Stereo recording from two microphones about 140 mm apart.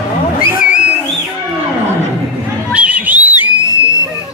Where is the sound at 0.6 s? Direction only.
60° left (ahead or behind).